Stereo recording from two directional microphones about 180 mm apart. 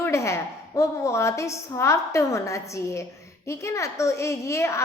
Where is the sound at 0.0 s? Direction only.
15° left (ahead or behind).